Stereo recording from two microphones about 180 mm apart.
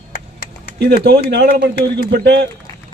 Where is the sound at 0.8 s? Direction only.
60° right (ahead or behind).